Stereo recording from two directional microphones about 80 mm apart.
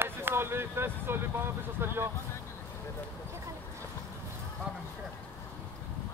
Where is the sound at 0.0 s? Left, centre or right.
Right.